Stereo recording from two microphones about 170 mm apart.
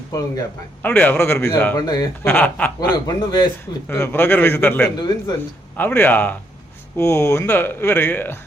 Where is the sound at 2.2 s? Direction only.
10° left (ahead or behind).